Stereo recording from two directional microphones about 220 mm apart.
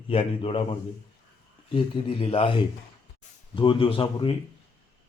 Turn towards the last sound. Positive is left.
turn(degrees=25)  # may be behind; listen again after turning